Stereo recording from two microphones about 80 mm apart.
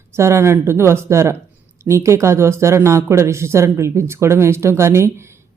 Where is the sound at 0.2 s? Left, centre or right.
Right.